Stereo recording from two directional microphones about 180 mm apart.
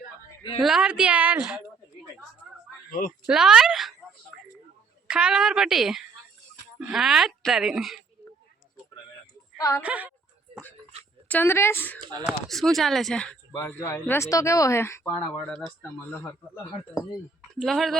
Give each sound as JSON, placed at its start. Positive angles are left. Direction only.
{"t": 0.6, "sound": "speech", "side_deg": -5}
{"t": 3.2, "sound": "speech", "side_deg": -5}
{"t": 5.0, "sound": "speech", "side_deg": -5}
{"t": 9.6, "sound": "speech", "side_deg": 15}
{"t": 9.8, "sound": "a woman's voice", "side_deg": -10}
{"t": 11.3, "sound": "speech", "side_deg": 10}
{"t": 12.2, "sound": "speech", "side_deg": 0}
{"t": 17.5, "sound": "speech", "side_deg": 0}